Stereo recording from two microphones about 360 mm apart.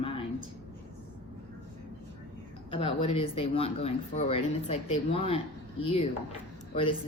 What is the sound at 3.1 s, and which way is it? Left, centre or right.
Speech, centre.